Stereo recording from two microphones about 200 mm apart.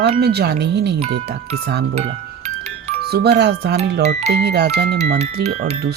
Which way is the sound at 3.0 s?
55° right (ahead or behind).